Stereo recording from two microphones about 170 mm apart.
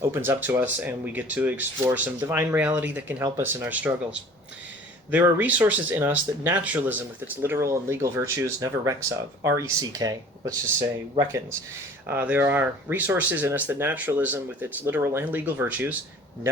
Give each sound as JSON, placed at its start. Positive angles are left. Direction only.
{"t": 0.1, "sound": "speech", "side_deg": -15}
{"t": 12.0, "sound": "speech", "side_deg": -10}